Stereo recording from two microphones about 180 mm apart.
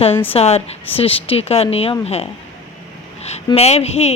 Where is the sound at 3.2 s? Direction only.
35° left (ahead or behind).